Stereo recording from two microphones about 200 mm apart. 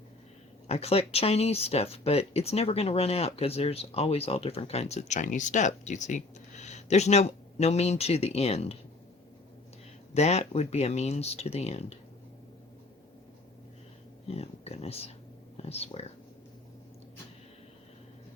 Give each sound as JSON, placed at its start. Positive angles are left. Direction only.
{"t": 0.7, "sound": "speech", "side_deg": 30}
{"t": 10.2, "sound": "speech", "side_deg": 30}
{"t": 14.3, "sound": "speech", "side_deg": 30}